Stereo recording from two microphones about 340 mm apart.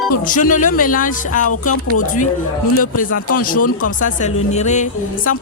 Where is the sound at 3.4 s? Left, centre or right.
Left.